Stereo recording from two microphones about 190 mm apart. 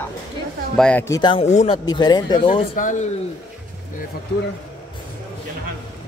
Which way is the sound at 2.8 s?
45° left (ahead or behind).